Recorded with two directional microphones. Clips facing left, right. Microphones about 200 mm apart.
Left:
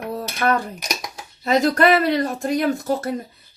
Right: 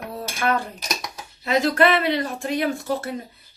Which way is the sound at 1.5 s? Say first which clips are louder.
Left 2 dB; 40° left (ahead or behind).